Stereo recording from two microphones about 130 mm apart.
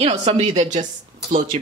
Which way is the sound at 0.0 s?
55° right (ahead or behind).